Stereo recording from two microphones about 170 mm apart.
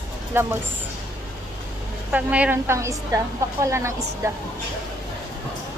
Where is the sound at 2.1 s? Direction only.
10° right (ahead or behind).